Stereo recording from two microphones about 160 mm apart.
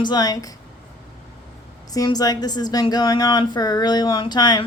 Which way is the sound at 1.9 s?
25° left (ahead or behind).